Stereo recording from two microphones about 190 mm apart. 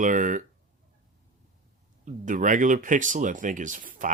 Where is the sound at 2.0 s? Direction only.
40° right (ahead or behind).